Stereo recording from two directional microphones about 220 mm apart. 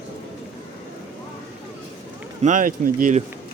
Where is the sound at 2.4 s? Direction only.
35° right (ahead or behind).